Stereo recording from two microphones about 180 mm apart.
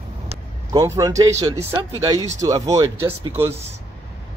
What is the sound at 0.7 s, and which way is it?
Speech, 20° right (ahead or behind).